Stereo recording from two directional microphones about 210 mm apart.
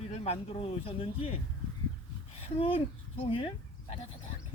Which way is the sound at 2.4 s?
25° left (ahead or behind).